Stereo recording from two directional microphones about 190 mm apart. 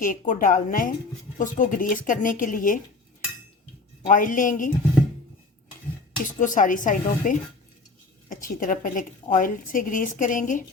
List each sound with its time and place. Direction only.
0.0 s a woman's voice: 45° left (ahead or behind)
4.0 s a woman's voice: 45° left (ahead or behind)
6.4 s a woman's voice: 45° left (ahead or behind)